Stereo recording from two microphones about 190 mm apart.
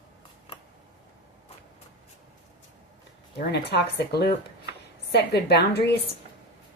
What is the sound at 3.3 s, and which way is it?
A woman's voice, 60° left (ahead or behind).